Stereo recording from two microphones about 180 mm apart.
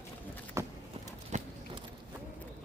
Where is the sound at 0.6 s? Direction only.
15° right (ahead or behind).